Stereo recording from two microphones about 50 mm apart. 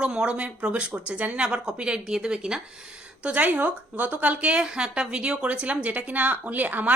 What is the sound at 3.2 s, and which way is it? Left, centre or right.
A woman's voice, right.